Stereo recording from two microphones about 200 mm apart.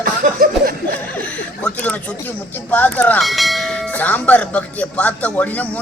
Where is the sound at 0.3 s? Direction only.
45° right (ahead or behind).